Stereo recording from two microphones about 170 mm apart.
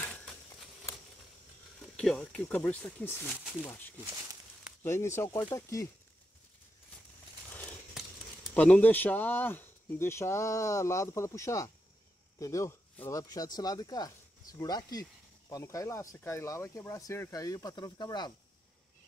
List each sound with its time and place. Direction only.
0.0 s a sound: 5° left (ahead or behind)
2.0 s speech: 5° left (ahead or behind)
3.3 s speech: 5° right (ahead or behind)
4.0 s speech: 20° right (ahead or behind)
4.8 s speech: 15° left (ahead or behind)
8.5 s speech: 10° left (ahead or behind); by 18.3 s 25° left (ahead or behind)